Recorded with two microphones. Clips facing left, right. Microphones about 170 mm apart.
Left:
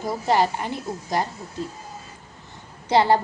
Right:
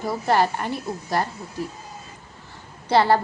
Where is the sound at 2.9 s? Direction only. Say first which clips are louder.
Even; 15° left (ahead or behind).